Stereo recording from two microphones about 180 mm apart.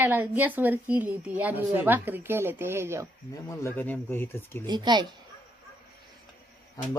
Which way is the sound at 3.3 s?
15° left (ahead or behind).